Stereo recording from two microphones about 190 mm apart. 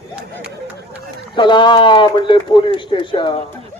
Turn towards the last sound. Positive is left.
turn(degrees=25)  # may be behind; listen again after turning